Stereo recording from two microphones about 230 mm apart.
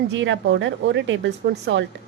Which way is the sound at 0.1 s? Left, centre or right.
Right.